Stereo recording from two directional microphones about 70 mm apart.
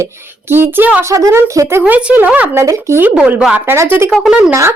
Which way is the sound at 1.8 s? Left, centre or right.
Right.